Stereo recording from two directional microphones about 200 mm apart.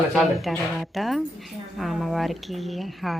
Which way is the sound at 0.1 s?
Centre (ahead or behind).